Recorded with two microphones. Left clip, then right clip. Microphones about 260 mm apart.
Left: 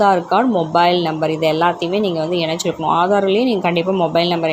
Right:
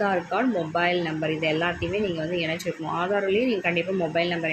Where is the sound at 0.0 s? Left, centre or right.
Left.